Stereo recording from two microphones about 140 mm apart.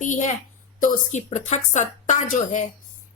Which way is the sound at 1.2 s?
55° left (ahead or behind).